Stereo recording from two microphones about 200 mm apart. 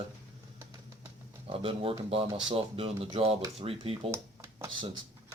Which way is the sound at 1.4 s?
30° right (ahead or behind).